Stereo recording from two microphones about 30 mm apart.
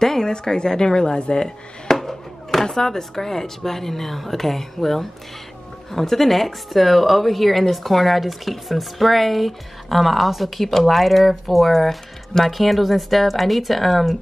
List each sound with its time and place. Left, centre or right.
0.0 s speech: centre
2.0 s a sound: centre
2.6 s speech: centre